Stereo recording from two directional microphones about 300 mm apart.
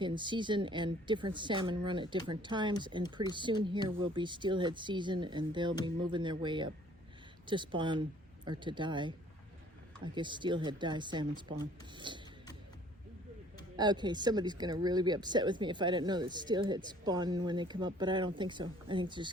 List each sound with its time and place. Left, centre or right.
0.0 s speech: centre
10.2 s speech: centre
13.7 s speech: centre